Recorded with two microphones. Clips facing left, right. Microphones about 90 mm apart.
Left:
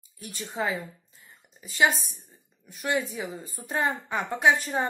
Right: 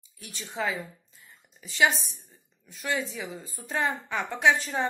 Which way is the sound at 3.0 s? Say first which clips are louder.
Left 1 dB; 50° left (ahead or behind).